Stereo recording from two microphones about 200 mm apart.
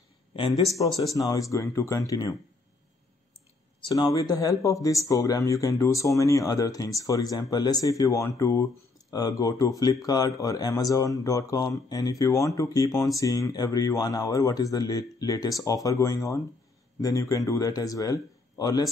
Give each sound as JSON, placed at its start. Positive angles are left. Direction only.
{"t": 0.7, "sound": "speech", "side_deg": 15}
{"t": 3.8, "sound": "speech", "side_deg": 20}